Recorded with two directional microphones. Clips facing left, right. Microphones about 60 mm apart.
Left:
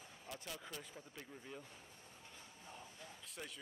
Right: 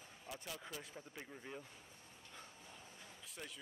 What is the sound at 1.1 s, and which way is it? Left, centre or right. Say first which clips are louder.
Speech: right 2 dB; centre.